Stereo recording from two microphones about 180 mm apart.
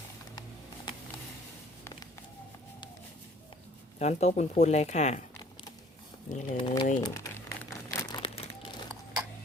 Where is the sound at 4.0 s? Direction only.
40° left (ahead or behind).